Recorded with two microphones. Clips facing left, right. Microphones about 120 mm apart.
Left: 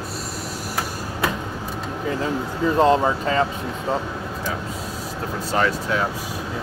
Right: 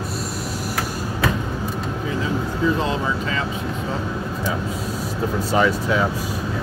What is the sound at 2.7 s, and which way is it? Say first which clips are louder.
Speech: left 6 dB; 45° left (ahead or behind).